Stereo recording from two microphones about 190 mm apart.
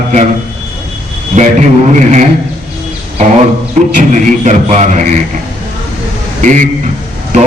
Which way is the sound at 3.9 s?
40° right (ahead or behind).